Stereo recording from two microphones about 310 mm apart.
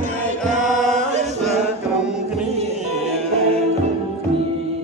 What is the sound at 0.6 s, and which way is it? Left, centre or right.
Chant, centre.